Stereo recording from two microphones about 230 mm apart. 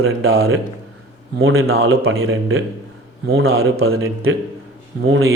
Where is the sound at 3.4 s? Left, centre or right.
Right.